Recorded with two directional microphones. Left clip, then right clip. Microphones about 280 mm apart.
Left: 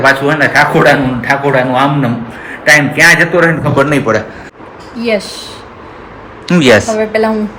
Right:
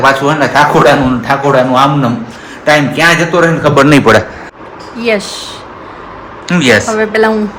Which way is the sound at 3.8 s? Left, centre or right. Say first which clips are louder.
Right 5 dB; right.